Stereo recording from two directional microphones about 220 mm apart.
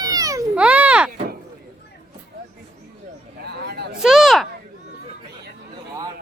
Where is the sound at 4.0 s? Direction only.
Centre (ahead or behind).